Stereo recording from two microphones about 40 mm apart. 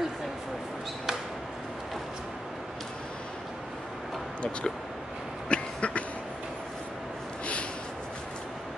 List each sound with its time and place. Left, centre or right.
5.5 s cough: left